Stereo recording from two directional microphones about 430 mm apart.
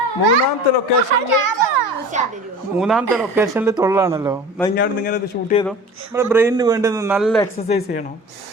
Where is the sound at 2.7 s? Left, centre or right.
Centre.